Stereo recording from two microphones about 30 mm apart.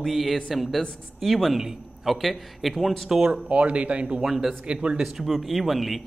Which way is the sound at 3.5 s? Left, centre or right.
Right.